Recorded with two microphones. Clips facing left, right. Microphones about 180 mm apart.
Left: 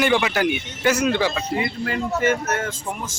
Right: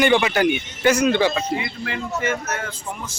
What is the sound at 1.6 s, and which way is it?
Speech, 45° left (ahead or behind).